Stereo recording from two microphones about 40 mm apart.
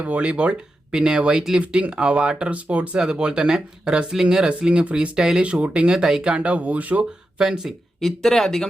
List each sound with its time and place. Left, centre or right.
0.0 s speech: right
3.0 s speech: right
5.4 s speech: right
6.0 s speech: centre
6.2 s speech: right
7.3 s speech: centre
8.0 s speech: centre